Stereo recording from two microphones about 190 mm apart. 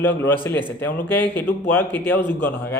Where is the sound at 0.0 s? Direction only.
10° left (ahead or behind).